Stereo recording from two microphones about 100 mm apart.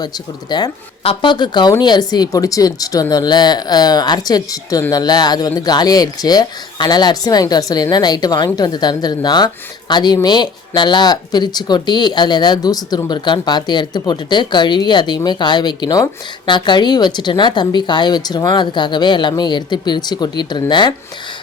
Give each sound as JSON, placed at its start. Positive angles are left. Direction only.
{"t": 0.5, "sound": "speech", "side_deg": 45}